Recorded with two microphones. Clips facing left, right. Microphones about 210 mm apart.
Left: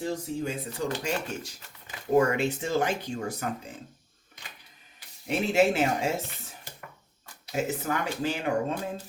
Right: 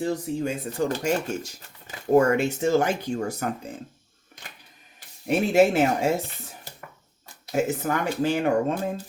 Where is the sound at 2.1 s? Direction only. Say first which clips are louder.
Right 4 dB; 45° right (ahead or behind).